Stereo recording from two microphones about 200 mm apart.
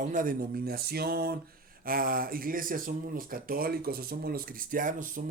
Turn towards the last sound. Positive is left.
turn(degrees=-40)  # may be behind; listen again after turning